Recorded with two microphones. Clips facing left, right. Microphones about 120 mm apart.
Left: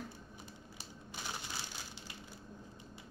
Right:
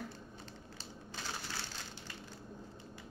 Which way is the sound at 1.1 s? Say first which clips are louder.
Right 1 dB; 15° left (ahead or behind).